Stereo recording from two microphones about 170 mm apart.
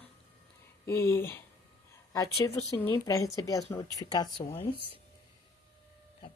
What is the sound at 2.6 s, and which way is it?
A woman's voice, 20° left (ahead or behind).